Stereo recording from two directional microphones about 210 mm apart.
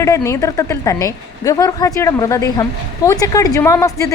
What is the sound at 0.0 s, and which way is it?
A woman's voice, 15° left (ahead or behind).